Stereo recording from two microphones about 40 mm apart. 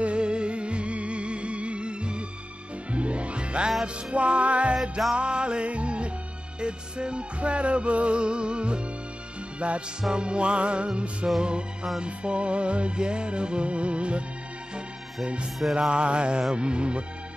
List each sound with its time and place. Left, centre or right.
0.0 s music: right
15.9 s music: right